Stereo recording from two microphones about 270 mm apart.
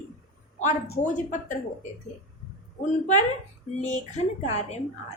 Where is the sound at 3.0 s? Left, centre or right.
Left.